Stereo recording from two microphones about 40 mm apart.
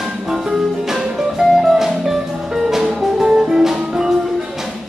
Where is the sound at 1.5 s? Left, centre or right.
Centre.